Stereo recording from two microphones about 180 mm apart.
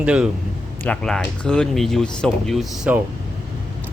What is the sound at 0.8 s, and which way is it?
Speech, 5° left (ahead or behind).